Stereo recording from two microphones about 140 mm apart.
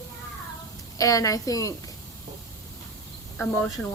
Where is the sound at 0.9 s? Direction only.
25° left (ahead or behind).